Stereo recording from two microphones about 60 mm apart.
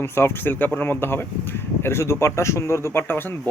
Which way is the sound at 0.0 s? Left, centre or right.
Left.